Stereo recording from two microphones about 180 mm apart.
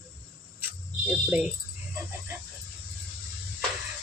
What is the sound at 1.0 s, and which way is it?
Speech, 5° right (ahead or behind).